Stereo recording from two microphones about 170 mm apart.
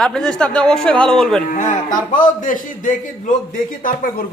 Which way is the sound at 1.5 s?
50° left (ahead or behind).